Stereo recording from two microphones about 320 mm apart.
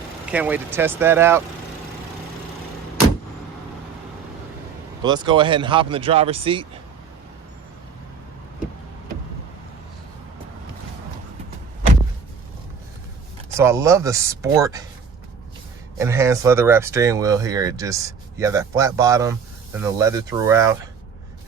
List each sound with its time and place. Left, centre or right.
0.3 s speech: centre
5.0 s speech: centre
13.6 s speech: centre
16.0 s speech: centre